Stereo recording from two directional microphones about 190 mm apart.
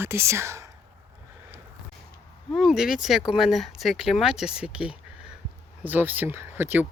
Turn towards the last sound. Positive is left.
turn(degrees=-10)  # may be behind; listen again after turning